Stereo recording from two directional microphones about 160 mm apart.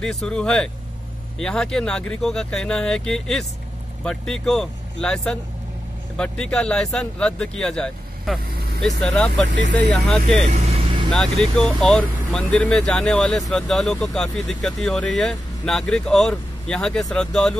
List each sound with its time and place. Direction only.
0.0 s speech: 5° left (ahead or behind)
10.5 s vehicle: 40° right (ahead or behind)
11.1 s speech: 5° left (ahead or behind)